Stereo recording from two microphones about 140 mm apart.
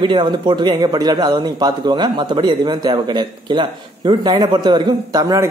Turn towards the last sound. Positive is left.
turn(degrees=-25)  # may be behind; listen again after turning